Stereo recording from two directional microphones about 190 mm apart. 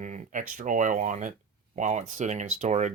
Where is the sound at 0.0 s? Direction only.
40° right (ahead or behind).